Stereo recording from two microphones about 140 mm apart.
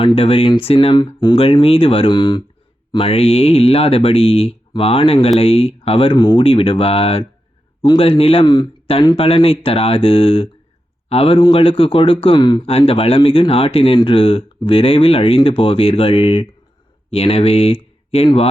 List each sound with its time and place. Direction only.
0.2 s speech: 40° left (ahead or behind)
12.6 s speech: 45° left (ahead or behind)